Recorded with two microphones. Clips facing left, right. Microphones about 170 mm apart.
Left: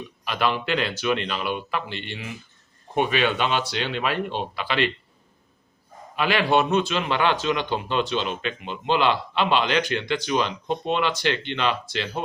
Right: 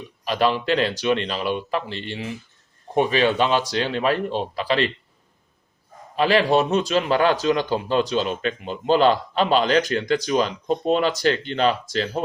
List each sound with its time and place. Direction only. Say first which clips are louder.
0.3 s speech: right 4 dB; 35° right (ahead or behind)
6.1 s speech: right 3 dB; 35° right (ahead or behind)